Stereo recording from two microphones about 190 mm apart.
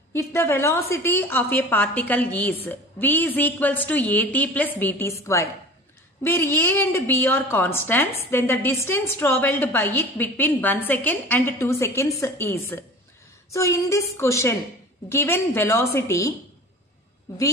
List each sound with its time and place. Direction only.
0.1 s a woman's voice: 15° left (ahead or behind)